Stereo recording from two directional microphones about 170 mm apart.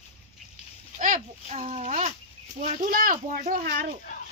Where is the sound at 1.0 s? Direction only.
50° right (ahead or behind).